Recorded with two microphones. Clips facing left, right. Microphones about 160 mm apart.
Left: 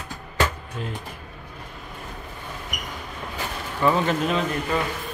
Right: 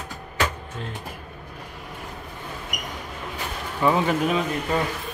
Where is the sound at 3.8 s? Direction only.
10° right (ahead or behind).